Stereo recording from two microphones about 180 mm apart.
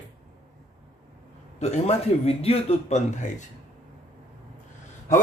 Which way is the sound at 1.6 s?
35° left (ahead or behind).